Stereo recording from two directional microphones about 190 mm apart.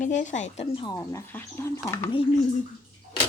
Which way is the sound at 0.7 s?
25° left (ahead or behind).